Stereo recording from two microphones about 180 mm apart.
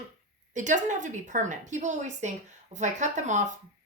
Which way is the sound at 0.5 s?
45° right (ahead or behind).